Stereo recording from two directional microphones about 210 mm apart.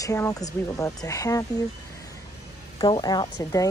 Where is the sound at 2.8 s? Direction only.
20° left (ahead or behind).